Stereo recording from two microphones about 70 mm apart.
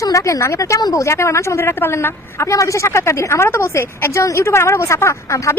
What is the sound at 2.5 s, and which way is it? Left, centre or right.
A woman's voice, left.